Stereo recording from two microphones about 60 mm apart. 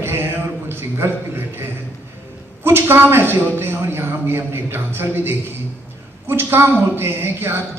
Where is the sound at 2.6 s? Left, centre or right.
Right.